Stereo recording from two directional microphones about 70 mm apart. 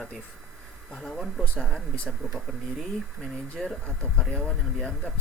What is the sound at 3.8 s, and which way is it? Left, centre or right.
Speech, centre.